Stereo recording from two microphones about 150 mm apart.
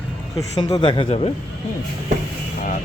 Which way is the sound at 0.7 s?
30° left (ahead or behind).